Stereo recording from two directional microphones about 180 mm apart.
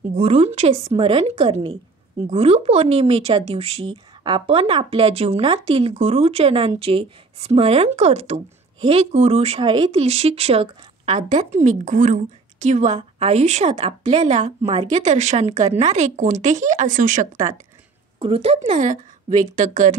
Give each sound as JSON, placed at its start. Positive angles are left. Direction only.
{"t": 0.1, "sound": "speech", "side_deg": -35}
{"t": 14.6, "sound": "speech", "side_deg": -25}
{"t": 14.9, "sound": "speech", "side_deg": -40}
{"t": 18.2, "sound": "speech", "side_deg": -35}